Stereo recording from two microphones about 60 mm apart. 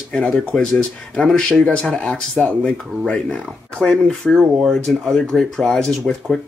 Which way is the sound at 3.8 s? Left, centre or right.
Centre.